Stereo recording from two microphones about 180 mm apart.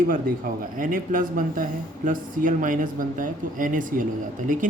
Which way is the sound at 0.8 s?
50° right (ahead or behind).